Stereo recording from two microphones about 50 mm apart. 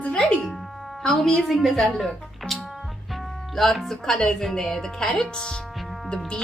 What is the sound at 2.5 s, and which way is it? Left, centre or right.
Music, centre.